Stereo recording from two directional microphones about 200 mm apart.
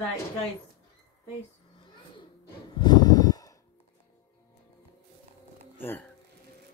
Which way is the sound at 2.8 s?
20° left (ahead or behind).